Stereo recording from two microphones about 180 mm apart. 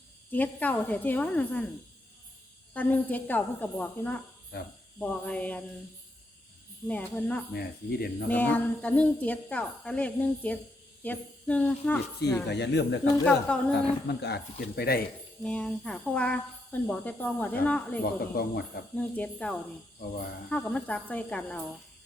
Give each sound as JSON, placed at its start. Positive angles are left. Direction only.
{"t": 0.3, "sound": "speech", "side_deg": 10}
{"t": 2.7, "sound": "speech", "side_deg": 10}
{"t": 6.8, "sound": "speech", "side_deg": 10}
{"t": 7.5, "sound": "speech", "side_deg": 60}
{"t": 8.3, "sound": "speech", "side_deg": 10}
{"t": 12.5, "sound": "speech", "side_deg": 70}
{"t": 13.2, "sound": "a woman's voice", "side_deg": 5}
{"t": 14.1, "sound": "speech", "side_deg": 65}
{"t": 15.4, "sound": "speech", "side_deg": 5}
{"t": 18.0, "sound": "speech", "side_deg": 55}
{"t": 18.9, "sound": "speech", "side_deg": 5}